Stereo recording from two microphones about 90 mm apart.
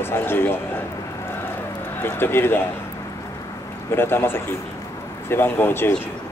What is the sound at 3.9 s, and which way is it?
A man's voice, 25° left (ahead or behind).